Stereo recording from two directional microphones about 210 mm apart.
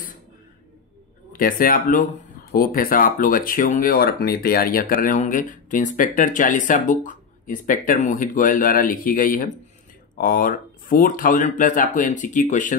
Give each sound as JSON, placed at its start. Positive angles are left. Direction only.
{"t": 1.3, "sound": "speech", "side_deg": 40}